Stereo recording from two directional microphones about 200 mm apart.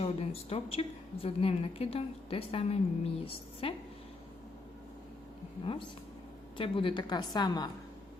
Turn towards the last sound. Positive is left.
turn(degrees=20)  # may be behind; listen again after turning